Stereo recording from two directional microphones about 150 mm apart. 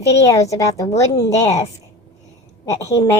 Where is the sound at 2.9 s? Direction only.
20° left (ahead or behind).